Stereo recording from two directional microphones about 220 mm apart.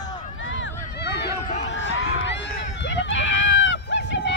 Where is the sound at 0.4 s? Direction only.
60° left (ahead or behind).